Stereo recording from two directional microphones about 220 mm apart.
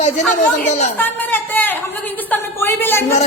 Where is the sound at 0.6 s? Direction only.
35° left (ahead or behind).